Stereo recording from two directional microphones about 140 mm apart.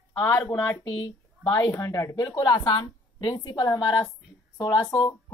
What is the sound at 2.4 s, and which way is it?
Speech, 30° left (ahead or behind).